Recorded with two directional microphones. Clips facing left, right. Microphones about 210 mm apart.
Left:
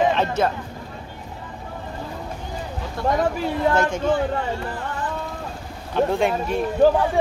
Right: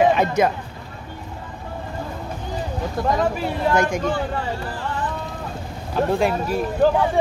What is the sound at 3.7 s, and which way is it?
Speech, 15° right (ahead or behind).